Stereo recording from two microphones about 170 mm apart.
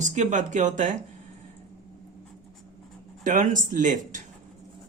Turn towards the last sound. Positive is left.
turn(degrees=-50)  # may be behind; listen again after turning